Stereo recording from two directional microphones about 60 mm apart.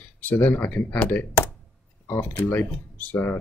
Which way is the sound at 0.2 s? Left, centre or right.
Left.